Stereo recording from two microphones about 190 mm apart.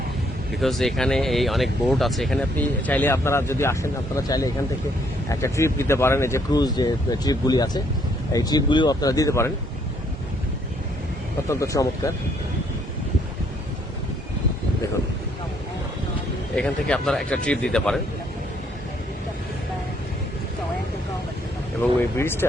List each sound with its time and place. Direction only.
0.5 s speech: centre (ahead or behind)
11.4 s speech: 15° left (ahead or behind)
16.6 s speech: 5° left (ahead or behind)
22.2 s speech: 10° left (ahead or behind)